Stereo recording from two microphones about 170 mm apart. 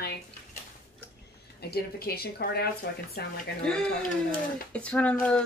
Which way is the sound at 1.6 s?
70° left (ahead or behind).